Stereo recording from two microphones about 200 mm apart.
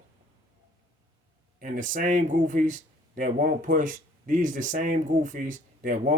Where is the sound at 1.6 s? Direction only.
40° right (ahead or behind).